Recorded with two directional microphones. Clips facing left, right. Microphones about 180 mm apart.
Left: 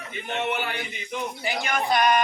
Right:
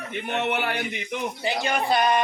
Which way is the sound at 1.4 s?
30° right (ahead or behind).